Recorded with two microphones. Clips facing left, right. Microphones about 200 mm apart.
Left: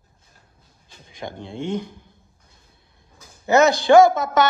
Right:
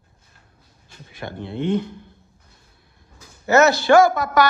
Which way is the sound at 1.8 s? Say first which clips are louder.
Right 4 dB; 55° right (ahead or behind).